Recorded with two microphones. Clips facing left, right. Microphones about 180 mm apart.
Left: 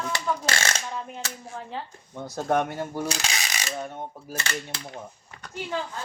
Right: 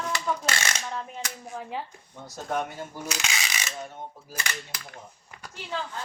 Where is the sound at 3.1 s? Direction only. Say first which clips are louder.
Left 2 dB; 35° left (ahead or behind).